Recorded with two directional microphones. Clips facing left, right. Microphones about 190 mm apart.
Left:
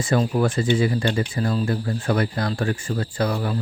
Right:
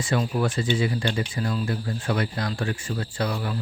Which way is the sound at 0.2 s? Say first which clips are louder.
Left 4 dB; 50° left (ahead or behind).